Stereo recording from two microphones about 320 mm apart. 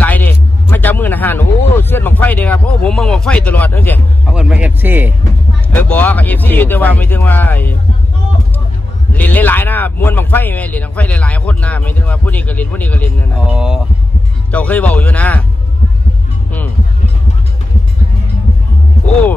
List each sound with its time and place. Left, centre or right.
0.0 s a sound: centre
5.8 s speech: centre
9.1 s speech: centre